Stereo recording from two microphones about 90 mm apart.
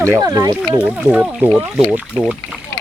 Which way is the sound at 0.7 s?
20° right (ahead or behind).